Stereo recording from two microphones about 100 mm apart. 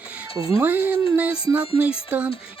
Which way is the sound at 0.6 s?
20° right (ahead or behind).